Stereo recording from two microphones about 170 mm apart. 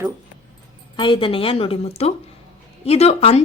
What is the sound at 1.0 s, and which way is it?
A woman's voice, 30° left (ahead or behind).